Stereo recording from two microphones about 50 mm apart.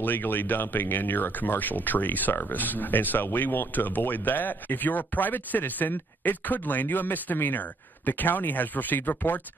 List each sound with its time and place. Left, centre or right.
0.0 s speech: left